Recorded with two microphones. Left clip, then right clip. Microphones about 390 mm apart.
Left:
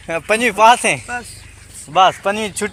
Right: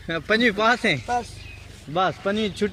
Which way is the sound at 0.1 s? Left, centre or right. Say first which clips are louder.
Left 4 dB; centre.